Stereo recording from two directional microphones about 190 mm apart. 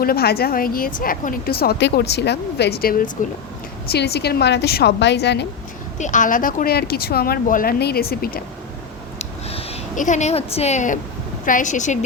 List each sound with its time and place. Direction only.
0.0 s a woman's voice: 55° left (ahead or behind)
6.0 s speech: 40° left (ahead or behind)
9.1 s a sound: 30° left (ahead or behind)
11.4 s a woman's voice: 45° left (ahead or behind)